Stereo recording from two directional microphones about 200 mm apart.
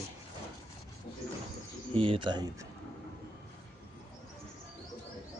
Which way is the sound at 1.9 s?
25° right (ahead or behind).